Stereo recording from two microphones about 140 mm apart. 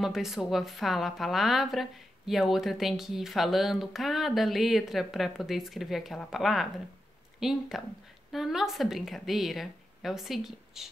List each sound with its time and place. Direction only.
0.0 s a woman's voice: centre (ahead or behind)